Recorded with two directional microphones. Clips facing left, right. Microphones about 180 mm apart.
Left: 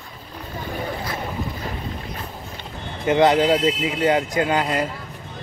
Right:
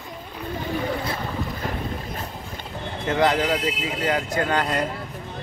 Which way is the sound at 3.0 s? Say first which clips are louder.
Left 5 dB; 20° left (ahead or behind).